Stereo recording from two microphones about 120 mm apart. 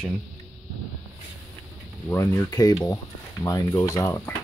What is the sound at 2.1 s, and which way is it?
Speech, 20° left (ahead or behind).